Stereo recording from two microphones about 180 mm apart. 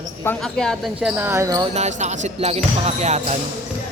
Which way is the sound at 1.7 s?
40° right (ahead or behind).